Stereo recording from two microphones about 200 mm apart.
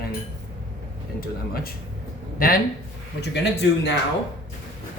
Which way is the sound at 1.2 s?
50° left (ahead or behind).